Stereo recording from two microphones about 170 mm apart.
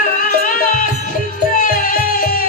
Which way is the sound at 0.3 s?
50° left (ahead or behind).